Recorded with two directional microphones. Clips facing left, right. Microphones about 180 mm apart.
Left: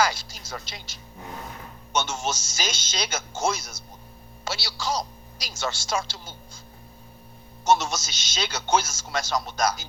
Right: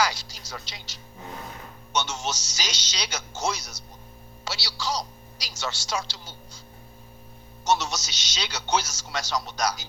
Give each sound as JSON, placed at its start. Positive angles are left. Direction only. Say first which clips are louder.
{"t": 0.0, "sound": "a man's voice", "louder": "left 2 dB", "side_deg": 50}
{"t": 7.6, "sound": "a man's voice", "louder": "left 3 dB", "side_deg": 50}